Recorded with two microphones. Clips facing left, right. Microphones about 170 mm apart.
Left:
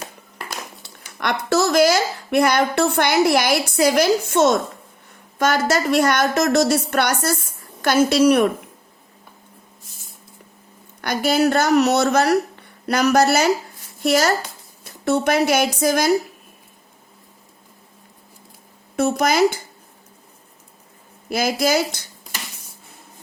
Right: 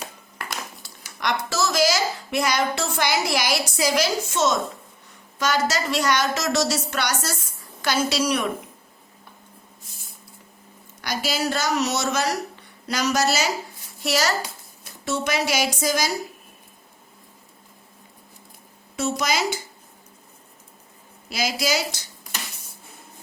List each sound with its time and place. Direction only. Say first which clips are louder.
1.2 s a woman's voice: left 5 dB; 60° left (ahead or behind)
11.0 s a woman's voice: left 8 dB; 55° left (ahead or behind)
18.9 s a woman's voice: left 7 dB; 55° left (ahead or behind)
21.2 s speech: left 6 dB; 55° left (ahead or behind)